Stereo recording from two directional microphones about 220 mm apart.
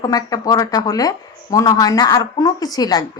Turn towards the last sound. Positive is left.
turn(degrees=15)  # may be behind; listen again after turning